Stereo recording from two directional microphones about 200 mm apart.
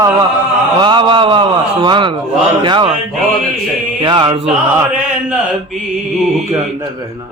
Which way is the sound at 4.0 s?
20° right (ahead or behind).